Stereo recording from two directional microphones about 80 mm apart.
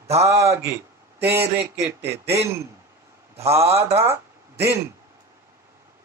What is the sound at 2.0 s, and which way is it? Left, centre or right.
Speech, right.